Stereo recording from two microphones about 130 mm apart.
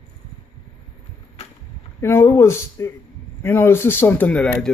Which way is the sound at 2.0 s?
20° left (ahead or behind).